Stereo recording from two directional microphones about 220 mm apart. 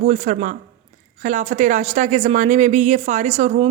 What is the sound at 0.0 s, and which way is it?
Speech, 30° right (ahead or behind).